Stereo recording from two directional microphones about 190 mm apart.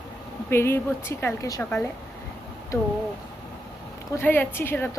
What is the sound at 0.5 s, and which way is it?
A woman's voice, 10° left (ahead or behind).